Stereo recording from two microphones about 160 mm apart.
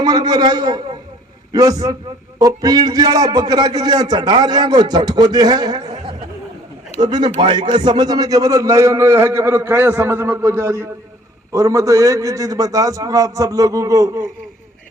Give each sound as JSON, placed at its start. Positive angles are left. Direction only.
{"t": 0.0, "sound": "a man's voice", "side_deg": -25}
{"t": 7.0, "sound": "a man's voice", "side_deg": -25}